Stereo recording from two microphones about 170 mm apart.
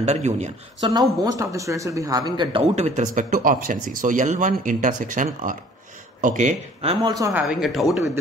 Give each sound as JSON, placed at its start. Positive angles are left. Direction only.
{"t": 0.0, "sound": "speech", "side_deg": -45}
{"t": 0.8, "sound": "speech", "side_deg": -20}
{"t": 2.7, "sound": "speech", "side_deg": -45}
{"t": 7.0, "sound": "speech", "side_deg": -20}
{"t": 7.4, "sound": "speech", "side_deg": 0}